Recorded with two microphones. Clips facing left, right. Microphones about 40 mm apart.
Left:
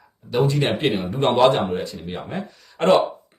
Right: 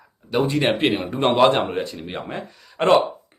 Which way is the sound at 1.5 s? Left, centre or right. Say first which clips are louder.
Even; right.